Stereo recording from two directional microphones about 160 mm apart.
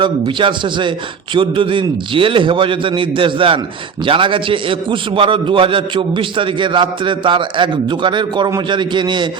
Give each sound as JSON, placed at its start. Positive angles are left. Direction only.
{"t": 0.0, "sound": "a man's voice", "side_deg": -30}